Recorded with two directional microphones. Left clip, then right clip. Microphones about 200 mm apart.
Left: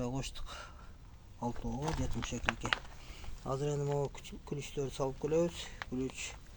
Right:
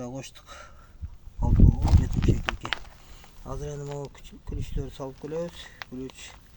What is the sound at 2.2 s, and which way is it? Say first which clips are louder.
Speech: right 7 dB; 55° right (ahead or behind).